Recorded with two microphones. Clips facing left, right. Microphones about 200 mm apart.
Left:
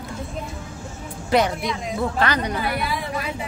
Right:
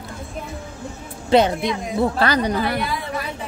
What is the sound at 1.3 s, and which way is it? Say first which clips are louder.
A woman's voice: right 4 dB; 25° right (ahead or behind).